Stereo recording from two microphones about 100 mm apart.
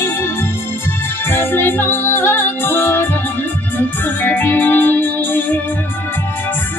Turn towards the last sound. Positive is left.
turn(degrees=20)  # may be behind; listen again after turning